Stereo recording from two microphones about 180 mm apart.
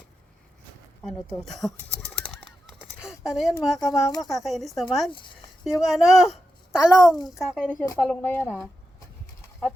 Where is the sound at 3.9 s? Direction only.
20° left (ahead or behind).